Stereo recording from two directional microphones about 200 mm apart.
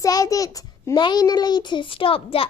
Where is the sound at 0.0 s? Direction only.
15° left (ahead or behind).